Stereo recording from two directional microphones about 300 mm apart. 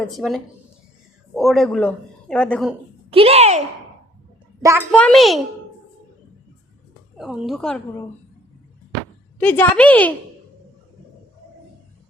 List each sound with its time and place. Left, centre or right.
0.0 s speech: centre
3.1 s speech: centre
4.9 s speech: centre
7.2 s speech: centre
9.4 s speech: centre